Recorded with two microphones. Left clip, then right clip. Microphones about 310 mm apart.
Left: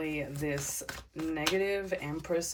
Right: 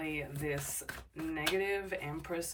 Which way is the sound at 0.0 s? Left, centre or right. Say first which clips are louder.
Left 3 dB; centre.